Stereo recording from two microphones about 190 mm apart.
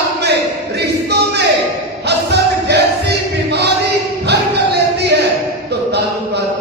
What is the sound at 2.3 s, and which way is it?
Music, 60° right (ahead or behind).